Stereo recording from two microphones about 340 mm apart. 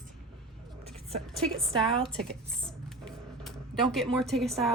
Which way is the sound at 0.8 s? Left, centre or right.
Centre.